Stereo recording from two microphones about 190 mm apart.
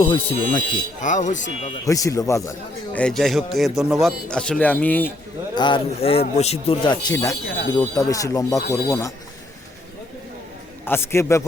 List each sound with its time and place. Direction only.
0.0 s speech: 30° left (ahead or behind)
0.7 s speech: 40° left (ahead or behind)
1.7 s speech: 15° left (ahead or behind)
5.5 s speech: 25° left (ahead or behind)
10.8 s speech: 10° left (ahead or behind)